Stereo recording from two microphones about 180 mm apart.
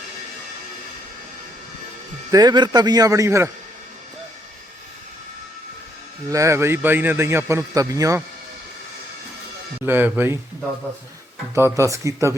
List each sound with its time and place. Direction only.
2.3 s a man's voice: 20° right (ahead or behind)
6.3 s a man's voice: 15° right (ahead or behind)
9.8 s a man's voice: 10° right (ahead or behind)
11.5 s a man's voice: 15° right (ahead or behind)